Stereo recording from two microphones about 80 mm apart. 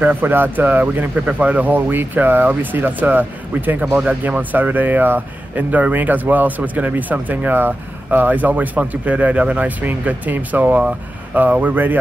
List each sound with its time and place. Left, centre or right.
0.0 s speech: right